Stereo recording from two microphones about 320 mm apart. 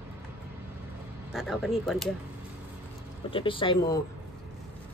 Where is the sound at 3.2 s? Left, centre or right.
Centre.